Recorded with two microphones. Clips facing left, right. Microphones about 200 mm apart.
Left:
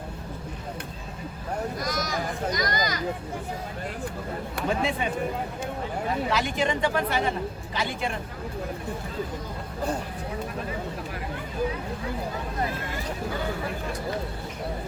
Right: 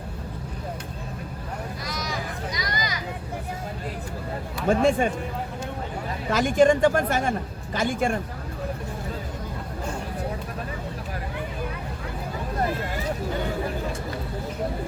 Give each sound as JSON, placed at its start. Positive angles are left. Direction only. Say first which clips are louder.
{"t": 1.8, "sound": "a sound", "louder": "left 3 dB", "side_deg": 45}
{"t": 4.7, "sound": "speech", "louder": "right 8 dB", "side_deg": -45}
{"t": 6.3, "sound": "speech", "louder": "right 13 dB", "side_deg": -45}